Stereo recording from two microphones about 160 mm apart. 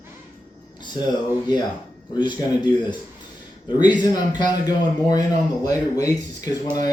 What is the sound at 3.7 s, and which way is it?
Speech, 25° left (ahead or behind).